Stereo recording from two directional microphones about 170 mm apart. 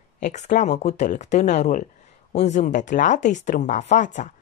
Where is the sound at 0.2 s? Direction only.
45° left (ahead or behind).